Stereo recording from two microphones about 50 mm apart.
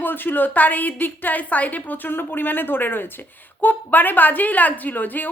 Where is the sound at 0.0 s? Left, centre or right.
Left.